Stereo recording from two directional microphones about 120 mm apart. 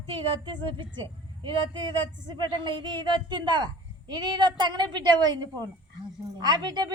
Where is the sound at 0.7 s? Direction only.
40° right (ahead or behind).